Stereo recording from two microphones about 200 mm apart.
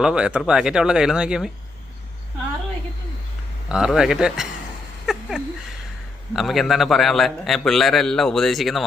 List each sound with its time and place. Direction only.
0.0 s a man's voice: 5° right (ahead or behind)
3.7 s a man's voice: 5° right (ahead or behind)
5.1 s a sound: centre (ahead or behind)
6.3 s a man's voice: centre (ahead or behind)